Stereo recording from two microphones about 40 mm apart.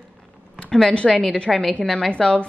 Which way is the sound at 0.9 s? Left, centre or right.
Left.